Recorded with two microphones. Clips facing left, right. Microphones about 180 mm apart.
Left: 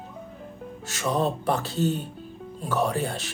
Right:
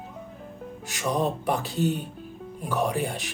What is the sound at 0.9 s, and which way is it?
Music, 15° right (ahead or behind).